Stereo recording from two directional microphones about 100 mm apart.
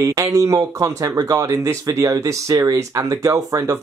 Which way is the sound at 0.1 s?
35° right (ahead or behind).